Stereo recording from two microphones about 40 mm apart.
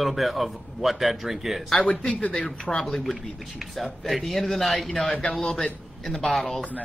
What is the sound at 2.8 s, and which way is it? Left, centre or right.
A man's voice, centre.